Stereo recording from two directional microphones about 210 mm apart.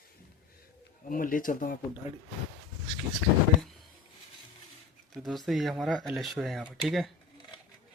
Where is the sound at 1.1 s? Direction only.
40° left (ahead or behind).